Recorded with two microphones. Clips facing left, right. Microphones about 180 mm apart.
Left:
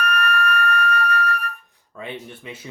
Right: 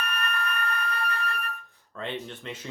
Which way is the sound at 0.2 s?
20° right (ahead or behind).